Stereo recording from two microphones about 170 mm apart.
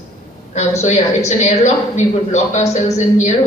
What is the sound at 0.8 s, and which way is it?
A woman's voice, 40° left (ahead or behind).